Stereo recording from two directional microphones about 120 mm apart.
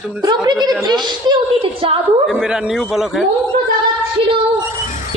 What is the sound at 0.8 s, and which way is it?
A woman's voice, 40° right (ahead or behind).